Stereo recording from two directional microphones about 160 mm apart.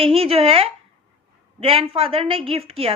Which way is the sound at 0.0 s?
35° right (ahead or behind).